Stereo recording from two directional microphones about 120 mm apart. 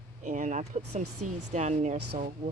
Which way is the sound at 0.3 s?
90° right.